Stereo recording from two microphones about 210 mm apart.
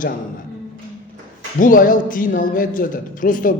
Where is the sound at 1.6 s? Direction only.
40° left (ahead or behind).